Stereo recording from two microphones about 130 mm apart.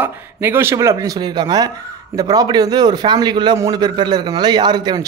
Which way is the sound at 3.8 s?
35° right (ahead or behind).